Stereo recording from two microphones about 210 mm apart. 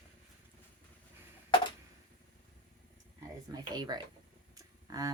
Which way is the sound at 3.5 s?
20° right (ahead or behind).